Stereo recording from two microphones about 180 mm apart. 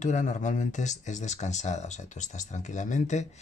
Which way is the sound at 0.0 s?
45° left (ahead or behind).